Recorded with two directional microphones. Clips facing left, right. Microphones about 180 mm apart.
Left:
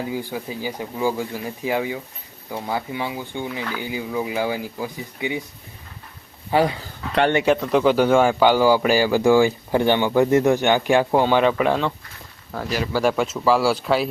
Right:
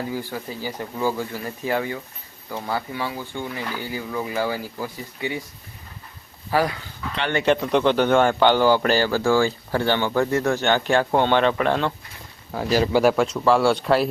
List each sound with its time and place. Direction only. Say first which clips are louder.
0.0 s speech: left 1 dB; 15° left (ahead or behind)
6.5 s speech: left 3 dB; 25° left (ahead or behind)
7.4 s speech: left 1 dB; 5° left (ahead or behind)
12.5 s speech: right 4 dB; 10° right (ahead or behind)